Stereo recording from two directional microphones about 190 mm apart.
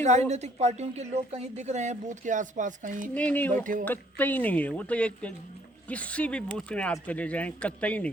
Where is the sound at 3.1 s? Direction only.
10° left (ahead or behind).